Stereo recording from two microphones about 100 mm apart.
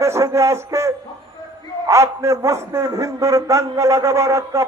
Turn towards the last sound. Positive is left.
turn(degrees=-30)  # may be behind; listen again after turning